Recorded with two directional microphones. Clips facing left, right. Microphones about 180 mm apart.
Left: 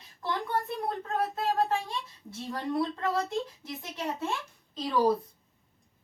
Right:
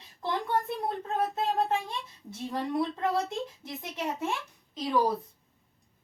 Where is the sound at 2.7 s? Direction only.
20° right (ahead or behind).